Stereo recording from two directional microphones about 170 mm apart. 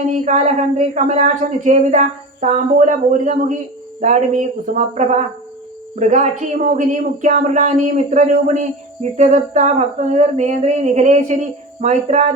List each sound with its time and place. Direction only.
0.1 s speech: 45° right (ahead or behind)